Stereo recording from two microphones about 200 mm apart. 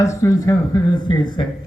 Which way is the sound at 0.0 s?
15° left (ahead or behind).